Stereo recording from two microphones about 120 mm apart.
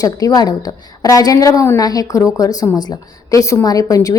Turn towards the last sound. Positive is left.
turn(degrees=30)  # may be behind; listen again after turning